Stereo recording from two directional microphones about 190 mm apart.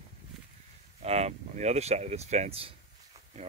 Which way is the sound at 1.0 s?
35° right (ahead or behind).